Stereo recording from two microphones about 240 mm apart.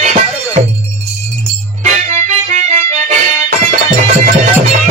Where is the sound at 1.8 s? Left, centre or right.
Right.